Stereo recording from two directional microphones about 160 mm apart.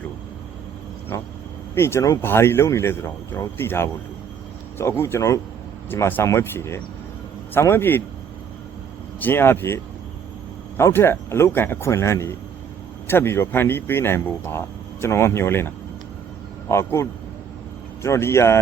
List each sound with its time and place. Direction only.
1.1 s speech: 15° left (ahead or behind)
9.2 s speech: 15° left (ahead or behind)